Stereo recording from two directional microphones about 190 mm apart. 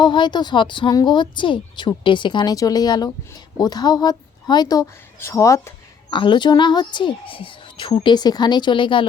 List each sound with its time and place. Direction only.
0.0 s a woman's voice: 25° left (ahead or behind)